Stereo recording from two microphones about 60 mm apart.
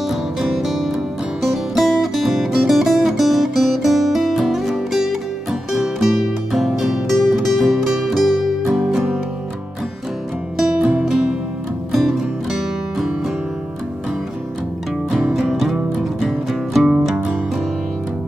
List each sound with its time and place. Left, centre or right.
0.0 s music: centre
8.6 s music: centre
10.6 s music: centre
15.0 s music: centre